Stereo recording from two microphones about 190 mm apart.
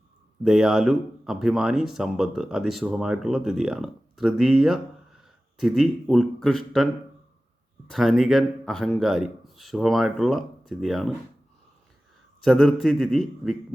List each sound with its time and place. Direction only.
0.4 s speech: 5° right (ahead or behind)
7.9 s speech: centre (ahead or behind)
12.4 s speech: centre (ahead or behind)